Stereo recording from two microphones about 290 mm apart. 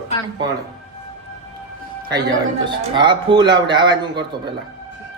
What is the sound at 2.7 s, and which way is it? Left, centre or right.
A man's voice, centre.